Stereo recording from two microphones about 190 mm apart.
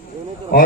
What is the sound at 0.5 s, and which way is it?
Speech, 55° left (ahead or behind).